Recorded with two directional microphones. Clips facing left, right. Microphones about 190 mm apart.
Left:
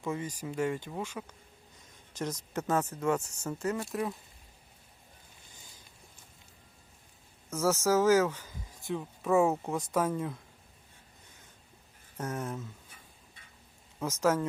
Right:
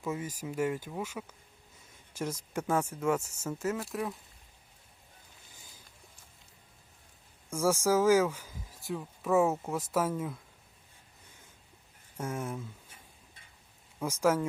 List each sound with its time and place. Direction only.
0.0 s speech: 5° right (ahead or behind)
7.5 s speech: 10° right (ahead or behind)
12.1 s speech: 10° right (ahead or behind)
14.0 s speech: 10° right (ahead or behind)